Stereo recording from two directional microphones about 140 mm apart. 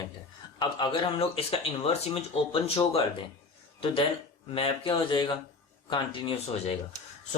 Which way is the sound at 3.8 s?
40° left (ahead or behind).